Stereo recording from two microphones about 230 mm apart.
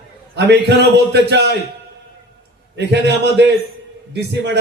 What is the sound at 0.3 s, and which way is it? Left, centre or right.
A man's voice, right.